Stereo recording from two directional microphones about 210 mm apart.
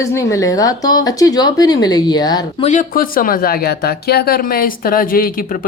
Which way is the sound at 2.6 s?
35° left (ahead or behind).